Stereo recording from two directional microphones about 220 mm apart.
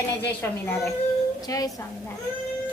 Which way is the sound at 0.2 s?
5° left (ahead or behind).